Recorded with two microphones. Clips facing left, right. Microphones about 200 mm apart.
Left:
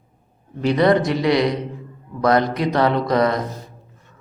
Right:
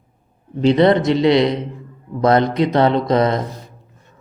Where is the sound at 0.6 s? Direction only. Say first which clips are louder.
Right 3 dB; 25° right (ahead or behind).